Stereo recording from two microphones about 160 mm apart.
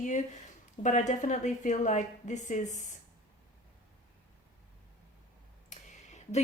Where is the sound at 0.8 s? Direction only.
45° left (ahead or behind).